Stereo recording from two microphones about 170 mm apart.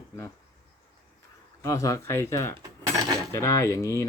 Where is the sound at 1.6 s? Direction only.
20° left (ahead or behind).